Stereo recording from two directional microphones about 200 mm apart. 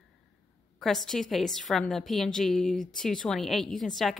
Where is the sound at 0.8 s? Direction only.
Centre (ahead or behind).